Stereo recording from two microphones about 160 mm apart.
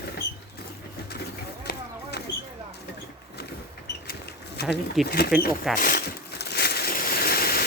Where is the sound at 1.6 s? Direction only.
90° left.